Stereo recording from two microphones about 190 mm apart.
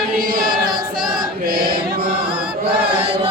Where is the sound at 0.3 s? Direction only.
50° right (ahead or behind).